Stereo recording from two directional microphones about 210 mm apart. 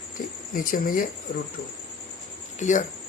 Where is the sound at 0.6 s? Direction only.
40° left (ahead or behind).